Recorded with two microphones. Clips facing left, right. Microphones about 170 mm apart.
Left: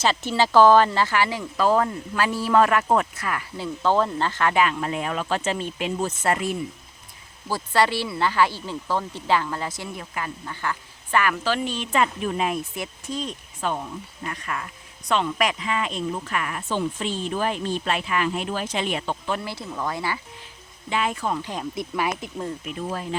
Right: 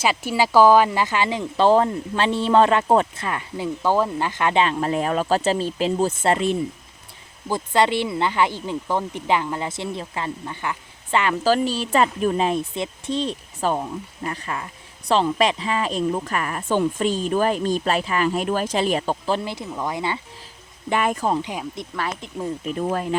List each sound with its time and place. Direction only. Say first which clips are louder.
0.0 s speech: right 1 dB; 10° right (ahead or behind)
3.8 s speech: even; 10° right (ahead or behind)
11.4 s speech: right 6 dB; 40° right (ahead or behind)
19.5 s speech: right 2 dB; 15° right (ahead or behind)
20.9 s speech: right 4 dB; 50° right (ahead or behind)
21.8 s speech: left 2 dB; 10° left (ahead or behind)
22.8 s speech: right 6 dB; 55° right (ahead or behind)